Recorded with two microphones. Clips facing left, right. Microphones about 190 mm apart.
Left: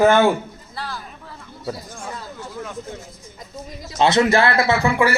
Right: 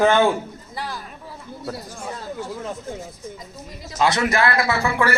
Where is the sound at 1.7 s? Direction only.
5° right (ahead or behind).